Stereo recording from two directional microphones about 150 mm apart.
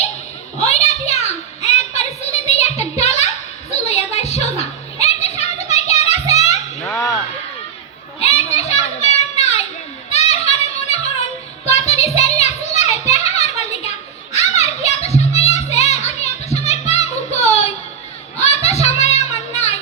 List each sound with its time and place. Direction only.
0.6 s a sound: 45° left (ahead or behind)
8.2 s children playing: 45° left (ahead or behind)
10.1 s music: 45° left (ahead or behind)
11.6 s child singing: 45° left (ahead or behind)
12.9 s a sound: 45° left (ahead or behind)
14.3 s music: 45° left (ahead or behind)
18.7 s music: 45° left (ahead or behind)